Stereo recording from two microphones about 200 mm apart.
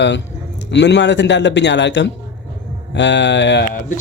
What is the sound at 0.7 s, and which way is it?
Speech, 60° left (ahead or behind).